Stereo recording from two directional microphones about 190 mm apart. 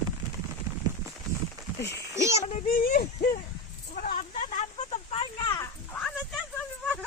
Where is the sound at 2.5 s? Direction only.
40° left (ahead or behind).